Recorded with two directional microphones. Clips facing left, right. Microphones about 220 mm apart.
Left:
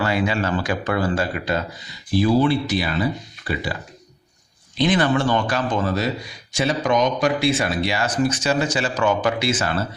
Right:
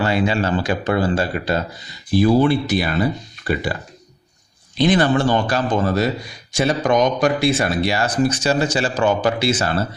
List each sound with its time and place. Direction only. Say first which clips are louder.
0.0 s speech: right 3 dB; 25° right (ahead or behind)
2.1 s speech: right 3 dB; 50° right (ahead or behind)
4.8 s speech: right 3 dB; 35° right (ahead or behind)